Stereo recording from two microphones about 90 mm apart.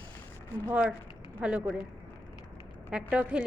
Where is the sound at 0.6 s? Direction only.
15° right (ahead or behind).